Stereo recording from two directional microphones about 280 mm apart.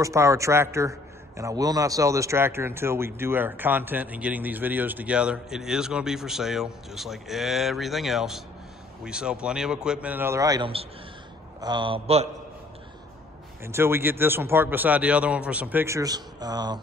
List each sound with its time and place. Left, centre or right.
0.0 s a man's voice: centre
13.7 s a man's voice: centre